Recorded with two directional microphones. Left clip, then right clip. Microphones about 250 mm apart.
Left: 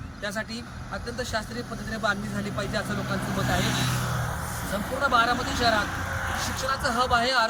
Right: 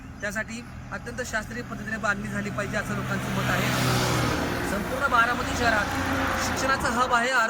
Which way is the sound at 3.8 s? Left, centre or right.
Right.